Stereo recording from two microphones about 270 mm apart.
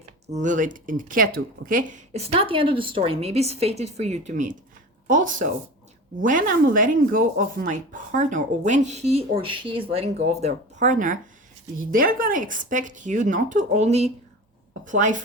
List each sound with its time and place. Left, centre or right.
0.3 s speech: right